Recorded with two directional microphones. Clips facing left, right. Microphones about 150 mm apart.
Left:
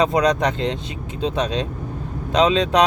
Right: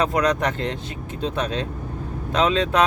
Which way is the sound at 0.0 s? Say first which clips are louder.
Left 3 dB; 20° left (ahead or behind).